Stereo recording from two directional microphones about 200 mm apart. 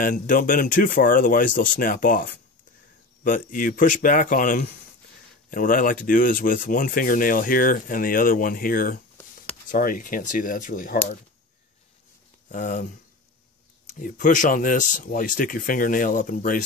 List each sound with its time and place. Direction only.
0.0 s speech: 45° left (ahead or behind)
3.3 s speech: 40° left (ahead or behind)
12.4 s speech: 40° left (ahead or behind)
13.8 s speech: 40° left (ahead or behind)